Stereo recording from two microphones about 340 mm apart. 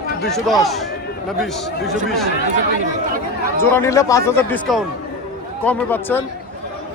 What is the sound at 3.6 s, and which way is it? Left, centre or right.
A man's voice, centre.